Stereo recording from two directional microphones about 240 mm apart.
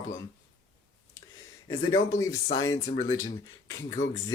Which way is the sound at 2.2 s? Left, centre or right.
Centre.